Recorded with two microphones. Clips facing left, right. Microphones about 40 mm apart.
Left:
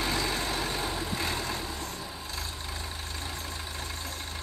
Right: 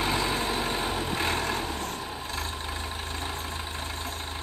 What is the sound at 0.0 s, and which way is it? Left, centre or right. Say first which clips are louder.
Vehicle: right 3 dB; right.